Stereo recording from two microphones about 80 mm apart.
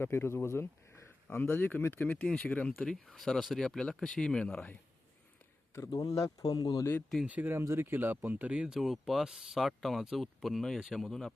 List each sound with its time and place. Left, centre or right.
0.0 s speech: left
2.8 s speech: centre
6.2 s speech: left
7.3 s speech: right
7.6 s speech: right; by 11.0 s centre
11.0 s speech: centre